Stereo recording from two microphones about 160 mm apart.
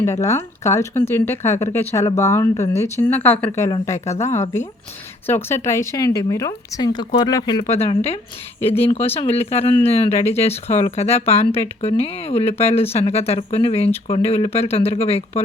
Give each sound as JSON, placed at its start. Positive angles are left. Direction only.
{"t": 0.0, "sound": "speech", "side_deg": 20}
{"t": 7.7, "sound": "speech", "side_deg": 40}